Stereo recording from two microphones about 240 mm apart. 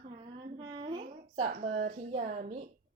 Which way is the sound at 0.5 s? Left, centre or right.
Right.